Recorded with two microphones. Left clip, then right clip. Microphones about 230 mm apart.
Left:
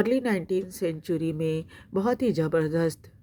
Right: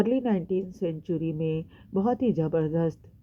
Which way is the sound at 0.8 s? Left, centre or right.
Left.